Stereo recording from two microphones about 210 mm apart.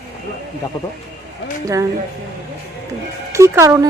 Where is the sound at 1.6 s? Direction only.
15° right (ahead or behind).